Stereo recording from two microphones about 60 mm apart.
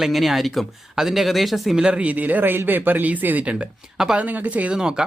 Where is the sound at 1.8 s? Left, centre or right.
Centre.